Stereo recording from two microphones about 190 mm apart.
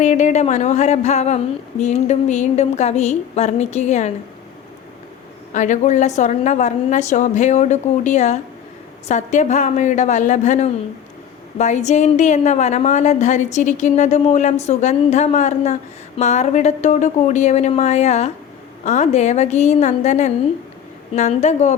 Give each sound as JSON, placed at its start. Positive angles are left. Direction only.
{"t": 0.0, "sound": "a woman's voice", "side_deg": 40}
{"t": 5.5, "sound": "a woman's voice", "side_deg": 40}